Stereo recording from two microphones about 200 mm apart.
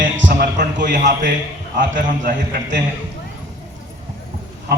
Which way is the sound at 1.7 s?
40° right (ahead or behind).